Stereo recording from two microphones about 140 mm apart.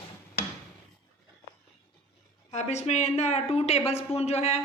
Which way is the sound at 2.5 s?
55° left (ahead or behind).